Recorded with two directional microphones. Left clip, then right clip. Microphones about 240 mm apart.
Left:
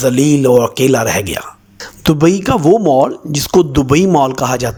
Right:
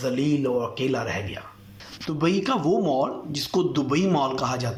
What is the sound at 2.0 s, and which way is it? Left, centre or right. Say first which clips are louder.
Speech: left 12 dB; left.